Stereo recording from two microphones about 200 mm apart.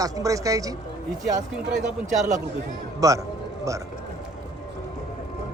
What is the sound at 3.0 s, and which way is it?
Speech, 15° right (ahead or behind).